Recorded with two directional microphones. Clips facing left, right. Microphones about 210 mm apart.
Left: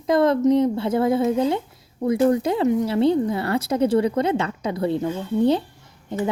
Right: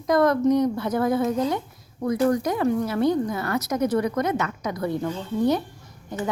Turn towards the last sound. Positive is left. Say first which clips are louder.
# left 4 dB
turn(degrees=25)  # may be behind; listen again after turning